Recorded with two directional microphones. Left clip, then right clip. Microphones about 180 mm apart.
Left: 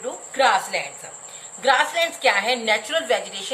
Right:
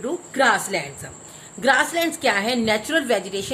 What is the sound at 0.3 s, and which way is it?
A woman's voice, 55° right (ahead or behind).